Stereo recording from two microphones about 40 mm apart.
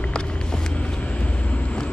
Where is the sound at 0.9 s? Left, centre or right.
Left.